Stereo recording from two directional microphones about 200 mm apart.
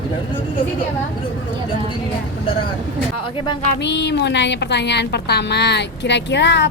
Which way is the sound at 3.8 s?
60° left (ahead or behind).